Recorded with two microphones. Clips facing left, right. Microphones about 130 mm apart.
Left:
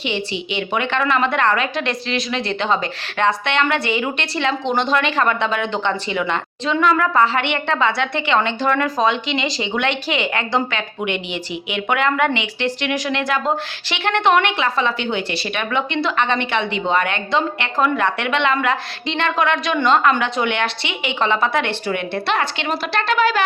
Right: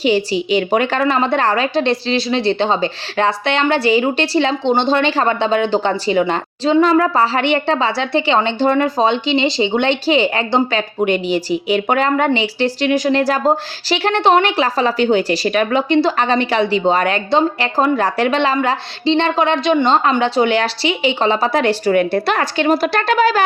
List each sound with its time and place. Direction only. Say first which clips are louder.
0.0 s a woman's voice: right 9 dB; 40° right (ahead or behind)